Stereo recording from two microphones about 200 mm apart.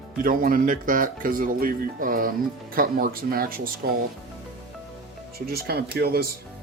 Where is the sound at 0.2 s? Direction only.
45° right (ahead or behind).